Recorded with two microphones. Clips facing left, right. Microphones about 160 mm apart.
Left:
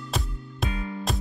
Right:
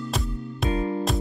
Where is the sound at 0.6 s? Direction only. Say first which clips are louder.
Right 8 dB; 35° right (ahead or behind).